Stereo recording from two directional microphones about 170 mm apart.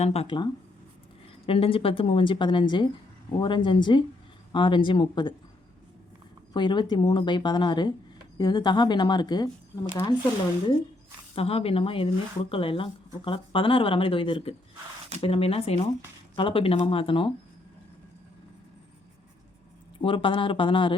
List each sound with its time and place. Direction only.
0.0 s a woman's voice: 35° left (ahead or behind)
6.5 s speech: 25° left (ahead or behind)
11.3 s a woman's voice: 35° left (ahead or behind)
20.0 s a woman's voice: 30° left (ahead or behind)